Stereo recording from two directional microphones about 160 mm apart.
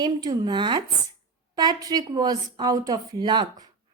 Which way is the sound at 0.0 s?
25° right (ahead or behind).